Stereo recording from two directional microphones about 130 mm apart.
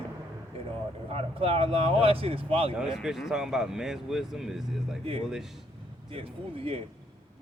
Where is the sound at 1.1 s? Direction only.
50° right (ahead or behind).